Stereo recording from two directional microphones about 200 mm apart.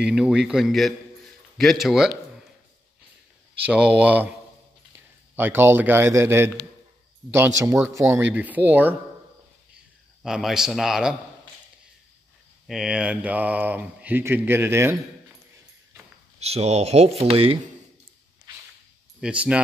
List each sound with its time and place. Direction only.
0.0 s a man's voice: 5° right (ahead or behind)
3.6 s a man's voice: 5° right (ahead or behind)
10.2 s a man's voice: centre (ahead or behind)
12.6 s speech: centre (ahead or behind)
16.3 s speech: 30° right (ahead or behind)
19.2 s a man's voice: 5° right (ahead or behind)